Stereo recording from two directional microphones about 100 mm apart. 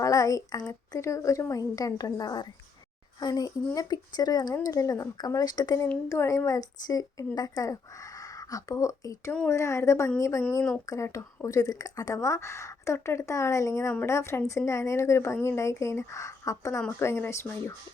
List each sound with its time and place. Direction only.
0.0 s a sound: 35° left (ahead or behind)
0.7 s speech: 30° left (ahead or behind)
6.1 s speech: 30° left (ahead or behind)